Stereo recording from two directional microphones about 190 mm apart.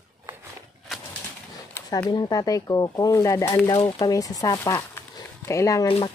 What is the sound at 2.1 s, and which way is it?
Speech, 20° left (ahead or behind).